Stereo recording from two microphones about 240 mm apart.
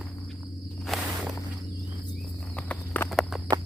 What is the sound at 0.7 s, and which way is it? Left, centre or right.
Walk, centre.